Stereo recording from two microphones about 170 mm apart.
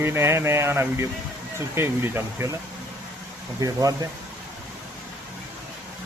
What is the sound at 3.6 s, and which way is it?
Speech, 20° right (ahead or behind).